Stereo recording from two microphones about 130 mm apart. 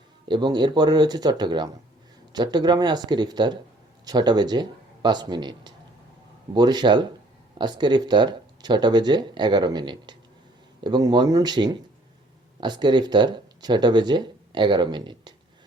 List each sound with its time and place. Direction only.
0.3 s speech: 35° right (ahead or behind)